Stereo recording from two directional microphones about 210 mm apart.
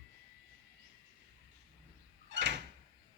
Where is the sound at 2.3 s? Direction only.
55° right (ahead or behind).